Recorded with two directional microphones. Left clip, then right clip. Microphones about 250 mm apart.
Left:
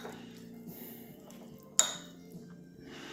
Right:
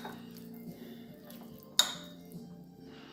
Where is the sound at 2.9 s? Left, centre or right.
Left.